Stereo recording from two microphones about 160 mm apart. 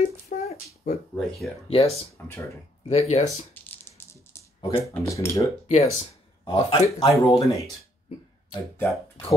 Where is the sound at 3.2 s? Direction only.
10° left (ahead or behind).